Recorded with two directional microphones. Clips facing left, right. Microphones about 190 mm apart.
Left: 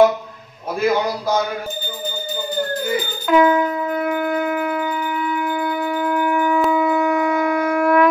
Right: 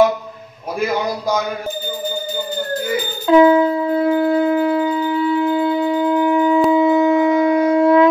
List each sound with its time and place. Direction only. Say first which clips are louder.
3.3 s shofar: right 5 dB; 30° right (ahead or behind)